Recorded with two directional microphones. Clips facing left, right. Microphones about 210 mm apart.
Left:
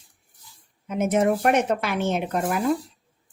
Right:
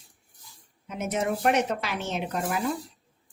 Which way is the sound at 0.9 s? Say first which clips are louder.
Left 7 dB; 50° left (ahead or behind).